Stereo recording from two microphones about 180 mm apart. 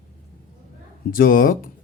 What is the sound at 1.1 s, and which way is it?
Speech, 50° left (ahead or behind).